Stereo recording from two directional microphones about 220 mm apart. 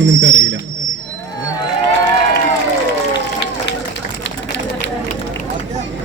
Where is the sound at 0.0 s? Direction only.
55° right (ahead or behind).